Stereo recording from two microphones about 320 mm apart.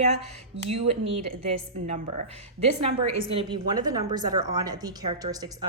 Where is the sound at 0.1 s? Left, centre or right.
Centre.